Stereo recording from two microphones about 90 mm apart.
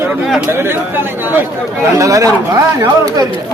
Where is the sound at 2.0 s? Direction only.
40° right (ahead or behind).